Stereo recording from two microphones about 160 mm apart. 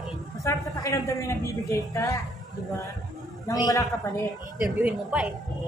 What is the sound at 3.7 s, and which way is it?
Speech, 20° left (ahead or behind).